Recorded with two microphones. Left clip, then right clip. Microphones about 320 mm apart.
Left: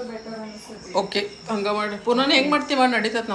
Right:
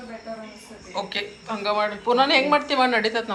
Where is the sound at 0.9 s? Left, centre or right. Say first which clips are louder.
Left 5 dB; centre.